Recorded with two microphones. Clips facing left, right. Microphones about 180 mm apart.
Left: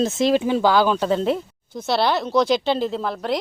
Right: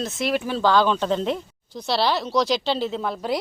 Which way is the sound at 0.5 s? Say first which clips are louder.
Left 2 dB; 10° left (ahead or behind).